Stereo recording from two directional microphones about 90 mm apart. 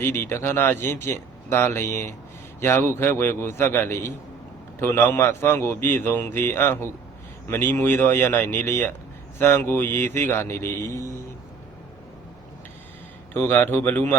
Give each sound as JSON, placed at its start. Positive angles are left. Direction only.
{"t": 0.0, "sound": "a man's voice", "side_deg": 30}
{"t": 13.3, "sound": "a man's voice", "side_deg": 20}